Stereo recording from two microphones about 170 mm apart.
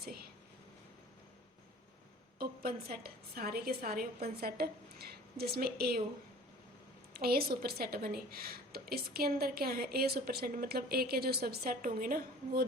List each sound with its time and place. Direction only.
2.4 s a woman's voice: 60° right (ahead or behind)
7.1 s a woman's voice: 65° right (ahead or behind)